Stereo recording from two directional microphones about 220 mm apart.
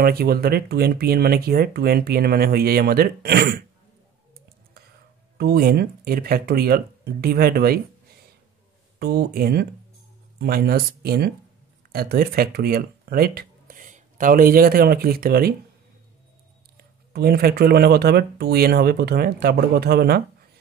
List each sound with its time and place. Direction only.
0.0 s speech: 45° right (ahead or behind)
5.4 s speech: 45° right (ahead or behind)
9.0 s speech: 45° right (ahead or behind)
17.1 s speech: 45° right (ahead or behind)